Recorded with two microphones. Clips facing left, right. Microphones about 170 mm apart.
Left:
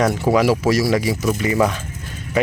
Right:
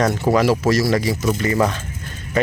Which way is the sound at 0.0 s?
5° left (ahead or behind).